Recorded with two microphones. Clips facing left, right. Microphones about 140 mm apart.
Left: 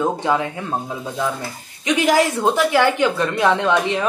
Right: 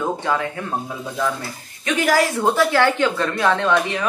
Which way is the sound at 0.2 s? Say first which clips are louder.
Left 2 dB; 20° left (ahead or behind).